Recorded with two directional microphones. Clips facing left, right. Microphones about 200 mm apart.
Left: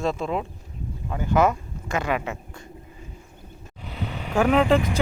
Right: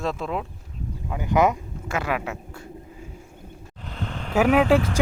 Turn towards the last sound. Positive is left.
turn(degrees=-10)  # may be behind; listen again after turning